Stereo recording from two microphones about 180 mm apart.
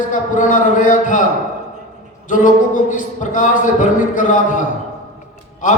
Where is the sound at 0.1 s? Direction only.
45° left (ahead or behind).